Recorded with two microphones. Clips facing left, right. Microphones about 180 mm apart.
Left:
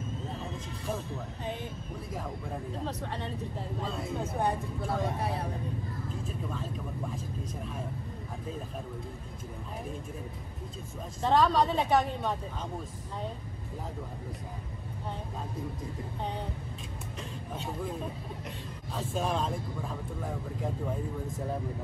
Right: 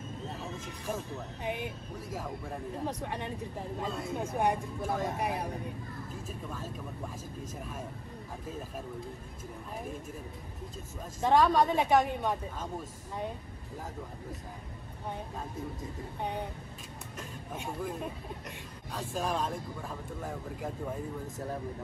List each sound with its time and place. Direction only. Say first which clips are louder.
1.4 s a woman's voice: right 3 dB; 15° right (ahead or behind)
2.8 s a woman's voice: right 2 dB; 15° right (ahead or behind)
4.8 s speech: left 1 dB; centre (ahead or behind)
5.2 s a woman's voice: even; 15° right (ahead or behind)
11.1 s a woman's voice: even; 15° right (ahead or behind)
17.2 s speech: left 1 dB; 5° right (ahead or behind)